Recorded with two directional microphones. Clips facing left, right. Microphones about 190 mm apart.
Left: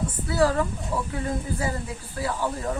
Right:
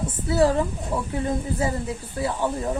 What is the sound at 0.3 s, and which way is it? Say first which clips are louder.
Speech: right 3 dB; 25° right (ahead or behind).